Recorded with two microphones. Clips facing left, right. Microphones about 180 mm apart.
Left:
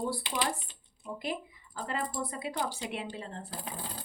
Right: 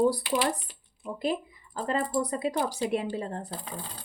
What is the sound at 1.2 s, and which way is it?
Speech, 40° right (ahead or behind).